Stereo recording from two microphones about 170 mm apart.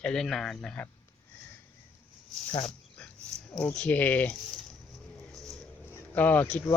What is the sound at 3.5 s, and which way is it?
Speech, 5° left (ahead or behind).